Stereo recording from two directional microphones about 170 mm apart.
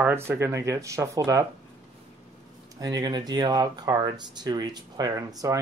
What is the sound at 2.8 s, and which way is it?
Speech, 20° right (ahead or behind).